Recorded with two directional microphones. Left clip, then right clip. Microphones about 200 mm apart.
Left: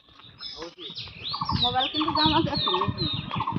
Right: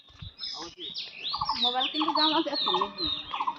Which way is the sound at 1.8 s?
20° left (ahead or behind).